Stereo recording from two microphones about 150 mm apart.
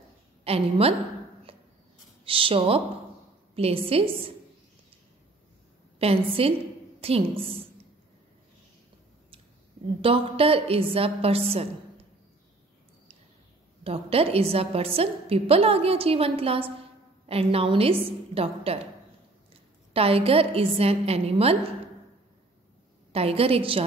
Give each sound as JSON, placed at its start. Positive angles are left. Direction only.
{"t": 0.4, "sound": "a woman's voice", "side_deg": -40}
{"t": 2.2, "sound": "a woman's voice", "side_deg": -35}
{"t": 5.9, "sound": "a woman's voice", "side_deg": -40}
{"t": 10.0, "sound": "a woman's voice", "side_deg": -40}
{"t": 13.8, "sound": "a woman's voice", "side_deg": -40}
{"t": 23.1, "sound": "a woman's voice", "side_deg": -40}